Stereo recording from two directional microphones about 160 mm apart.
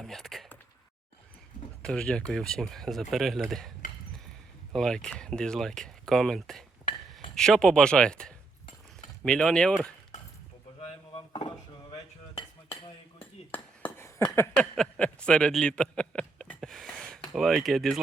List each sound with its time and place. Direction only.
0.0 s a sound: centre (ahead or behind)
1.8 s speech: 5° left (ahead or behind)
4.7 s speech: 5° left (ahead or behind)
10.8 s dishes: 35° left (ahead or behind)
13.1 s a sound: 10° left (ahead or behind)
17.3 s speech: centre (ahead or behind)